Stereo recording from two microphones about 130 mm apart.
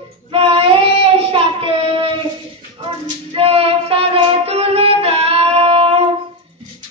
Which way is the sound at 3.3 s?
45° right (ahead or behind).